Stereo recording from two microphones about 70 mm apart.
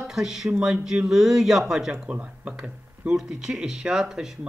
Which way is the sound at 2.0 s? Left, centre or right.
Centre.